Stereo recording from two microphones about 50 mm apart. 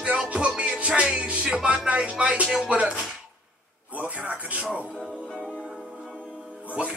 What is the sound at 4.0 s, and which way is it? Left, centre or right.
Music, right.